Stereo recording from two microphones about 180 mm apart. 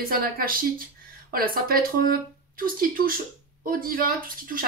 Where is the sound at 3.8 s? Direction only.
55° right (ahead or behind).